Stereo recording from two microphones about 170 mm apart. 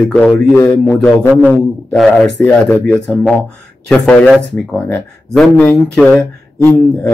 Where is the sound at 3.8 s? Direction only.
5° left (ahead or behind).